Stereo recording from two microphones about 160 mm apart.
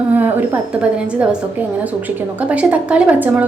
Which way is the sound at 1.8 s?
10° right (ahead or behind).